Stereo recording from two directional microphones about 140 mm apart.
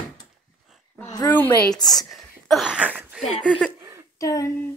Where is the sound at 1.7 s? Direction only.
30° left (ahead or behind).